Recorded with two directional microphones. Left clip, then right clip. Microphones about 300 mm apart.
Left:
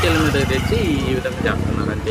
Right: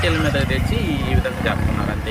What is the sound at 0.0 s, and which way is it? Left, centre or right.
Speech, centre.